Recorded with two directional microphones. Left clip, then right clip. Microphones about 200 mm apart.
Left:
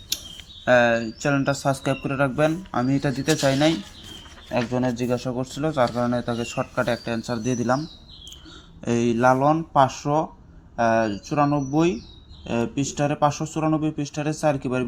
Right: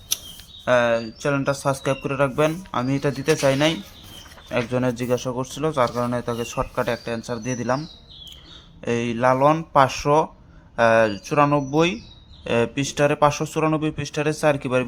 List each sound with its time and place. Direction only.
0.6 s a man's voice: 5° right (ahead or behind)
8.8 s speech: 5° right (ahead or behind)
9.4 s speech: 20° right (ahead or behind)